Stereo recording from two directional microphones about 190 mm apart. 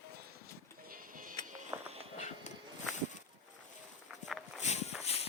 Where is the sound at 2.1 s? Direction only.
35° left (ahead or behind).